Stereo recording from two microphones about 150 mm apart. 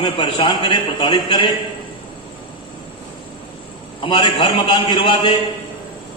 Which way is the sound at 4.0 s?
30° left (ahead or behind).